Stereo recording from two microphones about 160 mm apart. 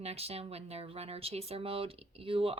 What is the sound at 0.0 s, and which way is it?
Speech, 40° right (ahead or behind).